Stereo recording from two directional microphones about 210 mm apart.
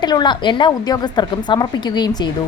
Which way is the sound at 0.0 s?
20° left (ahead or behind).